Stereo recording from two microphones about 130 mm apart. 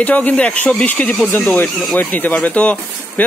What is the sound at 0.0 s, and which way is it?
Speech, 10° left (ahead or behind).